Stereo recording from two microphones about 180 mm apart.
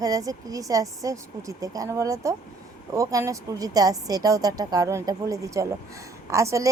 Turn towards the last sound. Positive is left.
turn(degrees=-15)  # may be behind; listen again after turning